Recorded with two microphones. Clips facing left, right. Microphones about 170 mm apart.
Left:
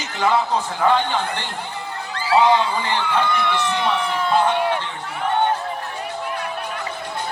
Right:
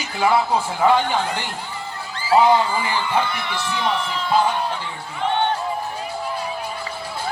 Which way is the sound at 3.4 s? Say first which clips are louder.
Left 3 dB; 60° left (ahead or behind).